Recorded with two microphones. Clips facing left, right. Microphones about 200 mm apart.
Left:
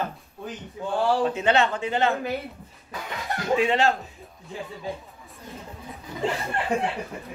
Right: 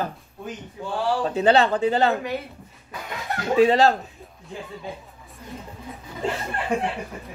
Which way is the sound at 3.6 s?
35° right (ahead or behind).